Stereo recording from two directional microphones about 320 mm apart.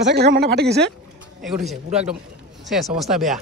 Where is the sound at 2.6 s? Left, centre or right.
Centre.